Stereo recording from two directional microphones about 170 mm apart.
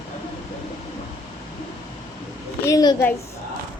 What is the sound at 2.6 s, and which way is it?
Speech, 20° left (ahead or behind).